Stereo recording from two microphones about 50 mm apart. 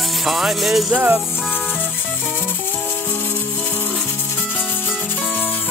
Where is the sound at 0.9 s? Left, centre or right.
Right.